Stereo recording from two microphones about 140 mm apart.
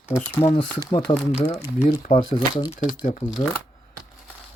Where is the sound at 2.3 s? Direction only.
30° left (ahead or behind).